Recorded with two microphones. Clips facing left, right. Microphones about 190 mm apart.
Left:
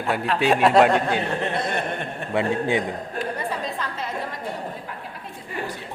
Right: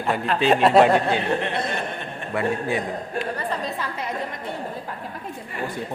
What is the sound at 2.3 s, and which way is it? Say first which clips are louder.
Speech: left 2 dB; 20° left (ahead or behind).